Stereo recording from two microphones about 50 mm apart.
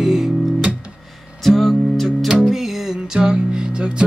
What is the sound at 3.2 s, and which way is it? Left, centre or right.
Music, centre.